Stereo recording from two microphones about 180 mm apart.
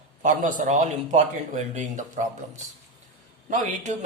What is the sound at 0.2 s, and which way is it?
A man's voice, 45° right (ahead or behind).